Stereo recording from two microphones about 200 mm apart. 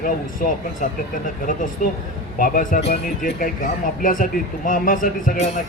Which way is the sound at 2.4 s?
40° left (ahead or behind).